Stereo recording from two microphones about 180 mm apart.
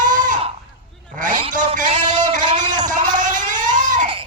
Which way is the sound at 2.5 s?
45° right (ahead or behind).